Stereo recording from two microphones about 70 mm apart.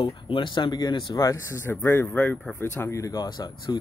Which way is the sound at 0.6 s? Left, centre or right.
Left.